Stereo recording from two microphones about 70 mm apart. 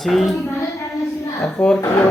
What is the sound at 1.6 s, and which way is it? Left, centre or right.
Speech, left.